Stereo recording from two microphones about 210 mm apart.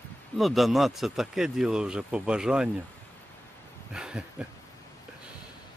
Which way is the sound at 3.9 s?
5° right (ahead or behind).